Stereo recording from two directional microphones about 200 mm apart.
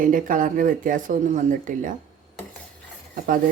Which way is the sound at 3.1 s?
45° right (ahead or behind).